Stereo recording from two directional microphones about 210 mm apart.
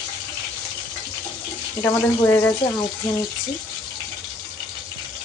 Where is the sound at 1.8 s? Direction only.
10° left (ahead or behind).